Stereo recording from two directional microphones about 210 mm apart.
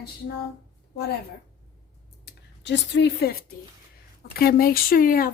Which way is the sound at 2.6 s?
55° left (ahead or behind).